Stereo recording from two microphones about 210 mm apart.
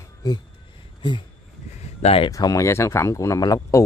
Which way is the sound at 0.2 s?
20° left (ahead or behind).